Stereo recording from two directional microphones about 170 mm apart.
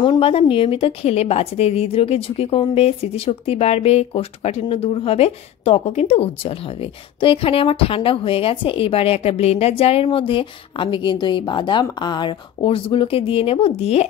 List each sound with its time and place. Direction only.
0.0 s a woman's voice: 30° left (ahead or behind)